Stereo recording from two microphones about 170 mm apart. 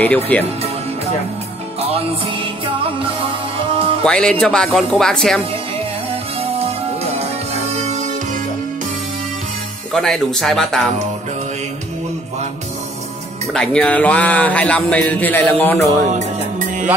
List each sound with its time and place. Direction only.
0.0 s speech: 10° left (ahead or behind)
3.0 s music: 30° right (ahead or behind)
4.0 s speech: 5° left (ahead or behind)
7.6 s music: 40° right (ahead or behind)
9.9 s speech: centre (ahead or behind)
13.5 s speech: 5° left (ahead or behind)
16.1 s music: 45° right (ahead or behind)